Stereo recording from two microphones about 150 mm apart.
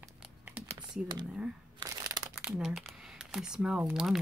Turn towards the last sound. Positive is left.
turn(degrees=-5)  # may be behind; listen again after turning